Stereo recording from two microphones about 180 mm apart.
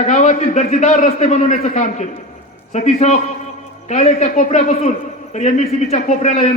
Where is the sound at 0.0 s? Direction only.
40° left (ahead or behind).